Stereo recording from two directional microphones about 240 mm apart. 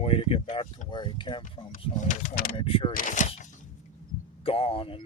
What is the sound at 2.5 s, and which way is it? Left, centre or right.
Speech, left.